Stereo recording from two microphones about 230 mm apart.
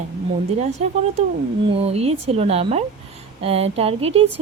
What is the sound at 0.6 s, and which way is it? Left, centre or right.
Speech, right.